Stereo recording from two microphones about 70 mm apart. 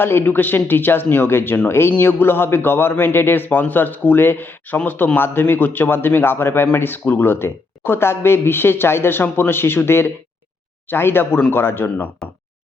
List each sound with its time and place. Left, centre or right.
0.0 s a man's voice: left